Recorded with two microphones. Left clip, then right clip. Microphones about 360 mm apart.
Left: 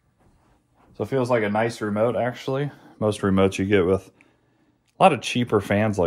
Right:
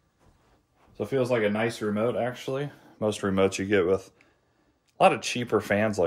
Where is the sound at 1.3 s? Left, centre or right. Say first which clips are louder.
Left 4 dB; centre.